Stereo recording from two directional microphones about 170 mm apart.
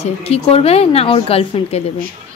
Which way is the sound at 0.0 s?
35° left (ahead or behind).